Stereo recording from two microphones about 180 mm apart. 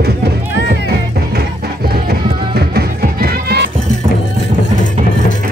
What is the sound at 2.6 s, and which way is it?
Music, 60° right (ahead or behind).